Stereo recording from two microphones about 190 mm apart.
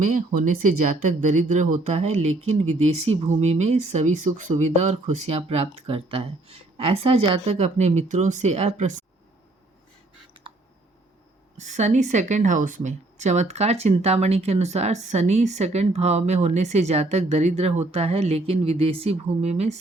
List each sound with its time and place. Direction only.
0.0 s speech: 45° right (ahead or behind)
11.5 s speech: 40° right (ahead or behind)